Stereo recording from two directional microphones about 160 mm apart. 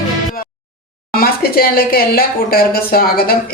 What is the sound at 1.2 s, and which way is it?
Speech, 70° left (ahead or behind).